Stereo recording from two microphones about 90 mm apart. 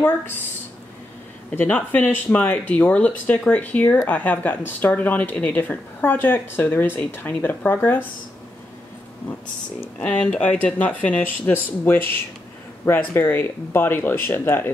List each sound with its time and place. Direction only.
1.5 s speech: 20° left (ahead or behind)
10.0 s speech: 10° left (ahead or behind)